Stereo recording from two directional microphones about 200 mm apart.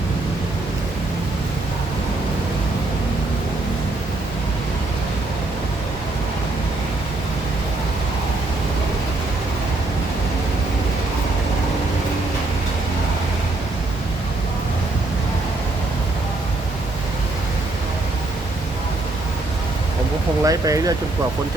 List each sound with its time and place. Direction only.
20.4 s speech: 15° right (ahead or behind)